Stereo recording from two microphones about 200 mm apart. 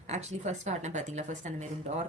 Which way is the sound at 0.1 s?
35° right (ahead or behind).